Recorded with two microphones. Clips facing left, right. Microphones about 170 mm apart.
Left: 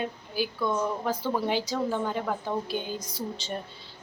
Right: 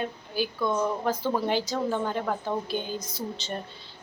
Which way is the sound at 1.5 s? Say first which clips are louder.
Right 1 dB; 10° left (ahead or behind).